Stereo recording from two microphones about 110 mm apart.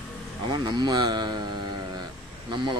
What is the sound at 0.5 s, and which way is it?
Speech, 40° right (ahead or behind).